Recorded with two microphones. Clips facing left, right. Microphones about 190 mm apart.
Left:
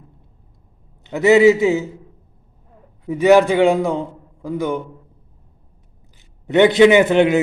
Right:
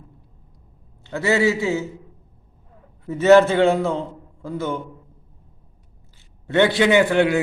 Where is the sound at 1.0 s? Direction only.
20° left (ahead or behind).